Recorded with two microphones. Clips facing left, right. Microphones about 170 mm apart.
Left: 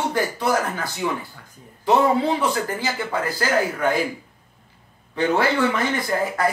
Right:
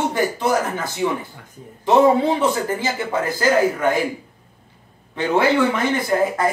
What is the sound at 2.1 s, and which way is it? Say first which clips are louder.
Speech: right 3 dB; 25° right (ahead or behind).